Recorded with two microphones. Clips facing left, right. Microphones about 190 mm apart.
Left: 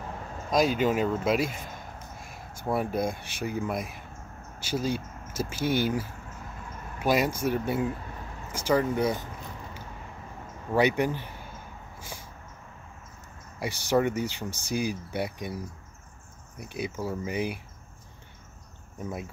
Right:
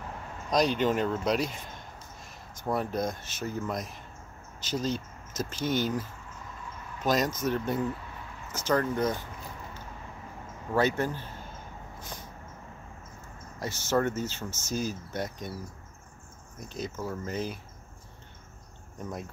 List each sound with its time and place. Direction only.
0.5 s speech: 5° left (ahead or behind)
10.7 s speech: 15° left (ahead or behind)
13.6 s speech: 15° left (ahead or behind)